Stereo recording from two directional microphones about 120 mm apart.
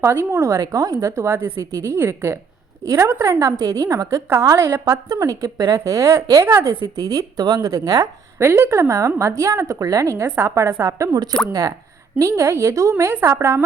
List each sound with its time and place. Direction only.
0.0 s a woman's voice: 20° right (ahead or behind)